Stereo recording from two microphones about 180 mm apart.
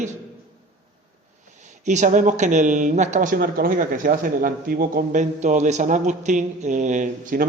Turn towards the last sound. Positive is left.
turn(degrees=-45)  # may be behind; listen again after turning